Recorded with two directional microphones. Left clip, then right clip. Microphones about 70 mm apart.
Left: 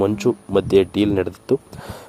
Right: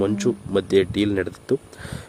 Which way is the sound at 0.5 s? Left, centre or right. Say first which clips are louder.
Left 3 dB; centre.